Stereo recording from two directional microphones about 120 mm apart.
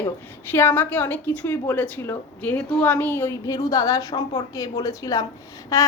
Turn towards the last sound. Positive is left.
turn(degrees=30)  # may be behind; listen again after turning